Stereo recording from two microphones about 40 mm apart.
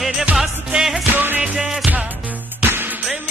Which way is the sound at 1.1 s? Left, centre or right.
Right.